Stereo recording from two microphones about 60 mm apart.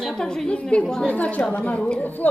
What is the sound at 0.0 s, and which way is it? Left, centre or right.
A woman's voice, centre.